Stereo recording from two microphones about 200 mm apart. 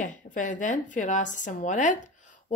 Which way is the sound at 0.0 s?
40° left (ahead or behind).